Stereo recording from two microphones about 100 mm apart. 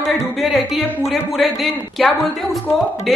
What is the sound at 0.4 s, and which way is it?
Speech, 5° right (ahead or behind).